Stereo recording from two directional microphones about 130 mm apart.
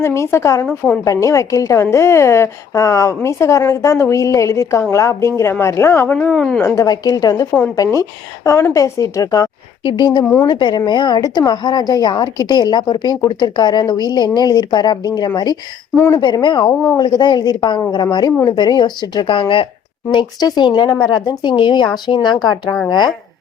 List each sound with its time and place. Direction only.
0.0 s a woman's voice: 20° left (ahead or behind)
6.1 s a woman's voice: 5° left (ahead or behind)
6.7 s a woman's voice: 30° left (ahead or behind)
8.4 s a woman's voice: 25° left (ahead or behind)
16.0 s a woman's voice: 20° left (ahead or behind)
16.2 s a woman's voice: 35° left (ahead or behind)